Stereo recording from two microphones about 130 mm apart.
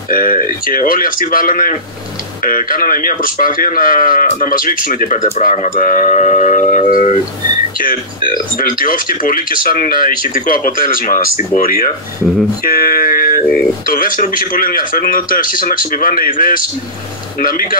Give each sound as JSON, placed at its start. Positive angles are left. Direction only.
{"t": 0.1, "sound": "speech", "side_deg": 90}
{"t": 12.8, "sound": "a sound", "side_deg": 90}
{"t": 13.8, "sound": "speech", "side_deg": 90}